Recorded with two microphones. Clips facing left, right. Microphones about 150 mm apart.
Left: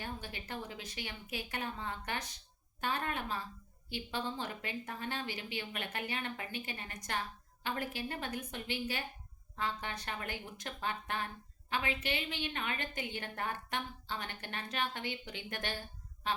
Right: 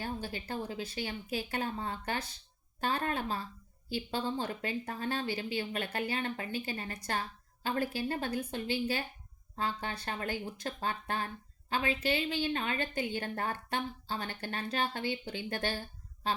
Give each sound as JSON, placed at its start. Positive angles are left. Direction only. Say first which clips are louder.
{"t": 0.0, "sound": "a woman's voice", "louder": "right 6 dB", "side_deg": -30}